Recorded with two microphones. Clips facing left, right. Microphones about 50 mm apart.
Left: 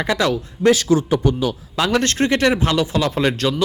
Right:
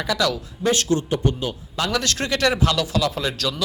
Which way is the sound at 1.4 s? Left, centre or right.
Left.